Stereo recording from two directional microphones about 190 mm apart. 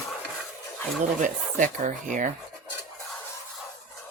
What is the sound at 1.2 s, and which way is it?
Speech, 40° right (ahead or behind).